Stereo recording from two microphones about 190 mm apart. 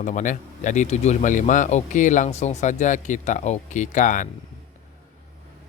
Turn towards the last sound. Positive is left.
turn(degrees=45)  # may be behind; listen again after turning